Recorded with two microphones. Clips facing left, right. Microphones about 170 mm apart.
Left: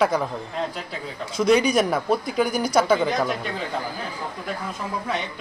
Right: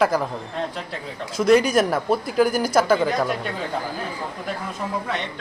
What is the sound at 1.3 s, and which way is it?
Speech, centre (ahead or behind).